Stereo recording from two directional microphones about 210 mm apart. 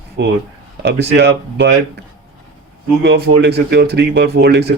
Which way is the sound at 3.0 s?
50° right (ahead or behind).